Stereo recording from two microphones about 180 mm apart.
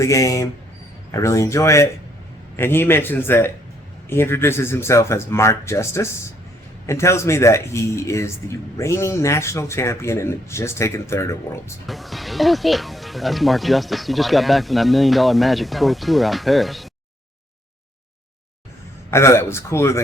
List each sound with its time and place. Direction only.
0.0 s speech: 15° left (ahead or behind)
11.9 s speech: centre (ahead or behind)
19.1 s speech: 15° left (ahead or behind)